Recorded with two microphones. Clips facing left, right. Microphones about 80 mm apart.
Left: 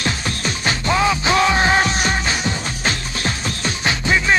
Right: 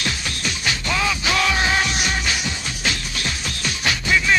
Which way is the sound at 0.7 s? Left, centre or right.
Left.